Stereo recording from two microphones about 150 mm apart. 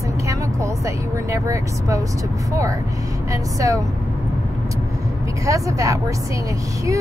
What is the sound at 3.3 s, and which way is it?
Speech, 20° right (ahead or behind).